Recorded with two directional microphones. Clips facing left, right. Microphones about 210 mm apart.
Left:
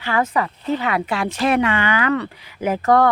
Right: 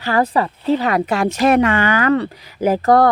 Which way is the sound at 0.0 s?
35° right (ahead or behind).